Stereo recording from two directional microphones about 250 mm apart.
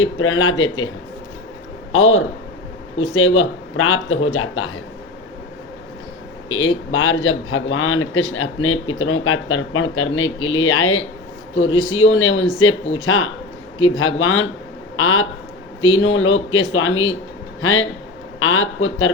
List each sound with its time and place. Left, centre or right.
0.0 s a man's voice: left
1.9 s a man's voice: left
3.3 s a man's voice: left
6.9 s a man's voice: left